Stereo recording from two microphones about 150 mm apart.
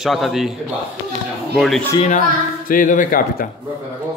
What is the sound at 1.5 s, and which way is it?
Speech, centre (ahead or behind).